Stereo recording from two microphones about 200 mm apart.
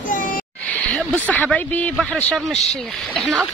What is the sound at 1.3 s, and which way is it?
Speech, 5° left (ahead or behind).